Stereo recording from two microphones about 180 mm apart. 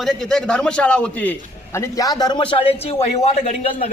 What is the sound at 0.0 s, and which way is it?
A man's voice, centre (ahead or behind).